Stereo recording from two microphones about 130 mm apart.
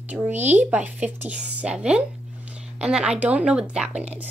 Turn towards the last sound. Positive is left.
turn(degrees=-5)  # may be behind; listen again after turning